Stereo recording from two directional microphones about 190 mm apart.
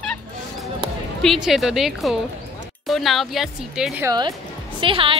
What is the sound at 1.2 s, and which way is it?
Speech, centre (ahead or behind).